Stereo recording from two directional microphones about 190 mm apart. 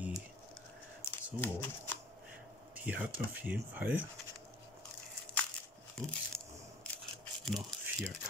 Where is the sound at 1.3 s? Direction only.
10° left (ahead or behind).